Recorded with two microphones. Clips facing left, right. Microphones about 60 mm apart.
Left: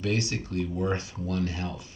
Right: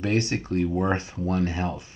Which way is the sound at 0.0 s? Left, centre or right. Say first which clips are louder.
Right 4 dB; right.